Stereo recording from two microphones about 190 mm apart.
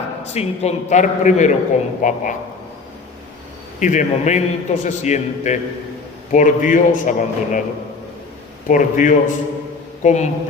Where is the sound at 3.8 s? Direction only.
40° left (ahead or behind).